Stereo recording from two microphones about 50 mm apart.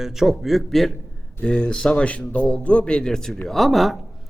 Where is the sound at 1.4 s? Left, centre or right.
Left; by 4.0 s centre.